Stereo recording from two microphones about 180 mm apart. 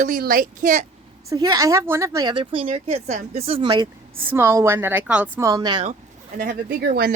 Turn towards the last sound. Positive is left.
turn(degrees=-60)  # may be behind; listen again after turning